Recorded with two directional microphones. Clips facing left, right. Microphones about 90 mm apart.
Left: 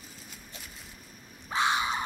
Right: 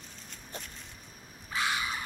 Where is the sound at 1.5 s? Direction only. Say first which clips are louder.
Left 5 dB; 30° left (ahead or behind).